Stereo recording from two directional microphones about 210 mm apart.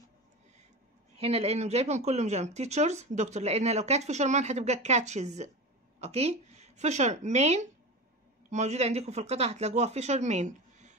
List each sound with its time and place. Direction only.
1.2 s speech: 30° right (ahead or behind)